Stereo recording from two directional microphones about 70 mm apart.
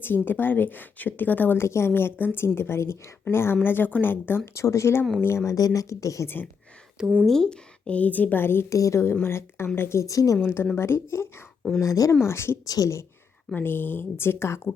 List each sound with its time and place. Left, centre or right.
0.0 s a woman's voice: left
1.5 s a woman's voice: left
4.5 s speech: left
5.5 s speech: left
6.2 s a woman's voice: left
7.3 s a woman's voice: centre; by 8.6 s left
8.7 s a woman's voice: left
10.4 s a woman's voice: left
11.8 s speech: left
12.2 s a woman's voice: left
12.6 s speech: left
13.6 s a woman's voice: left